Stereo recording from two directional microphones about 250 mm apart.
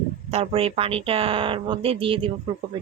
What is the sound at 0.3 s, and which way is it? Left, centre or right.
Speech, right.